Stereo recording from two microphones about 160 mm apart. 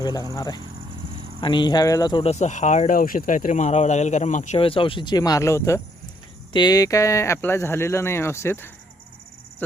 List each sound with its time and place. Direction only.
0.0 s speech: 25° left (ahead or behind)
2.2 s speech: 45° left (ahead or behind); by 8.7 s 15° left (ahead or behind)